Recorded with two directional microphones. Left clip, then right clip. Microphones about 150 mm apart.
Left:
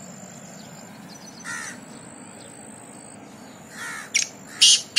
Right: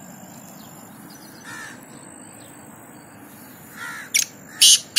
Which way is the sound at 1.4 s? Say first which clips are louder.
Left 3 dB; 35° left (ahead or behind).